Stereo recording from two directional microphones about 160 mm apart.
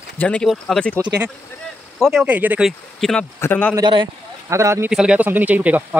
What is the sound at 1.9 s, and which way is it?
Speech, centre (ahead or behind).